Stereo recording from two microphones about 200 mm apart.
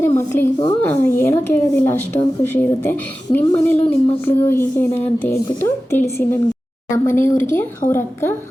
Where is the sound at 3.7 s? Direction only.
30° left (ahead or behind).